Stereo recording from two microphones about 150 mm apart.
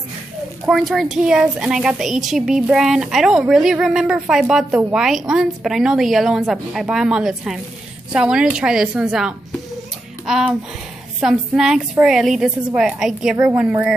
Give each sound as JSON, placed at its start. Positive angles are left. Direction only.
{"t": 0.7, "sound": "a woman's voice", "side_deg": 0}